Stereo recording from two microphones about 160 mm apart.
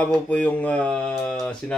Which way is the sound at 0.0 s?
10° left (ahead or behind).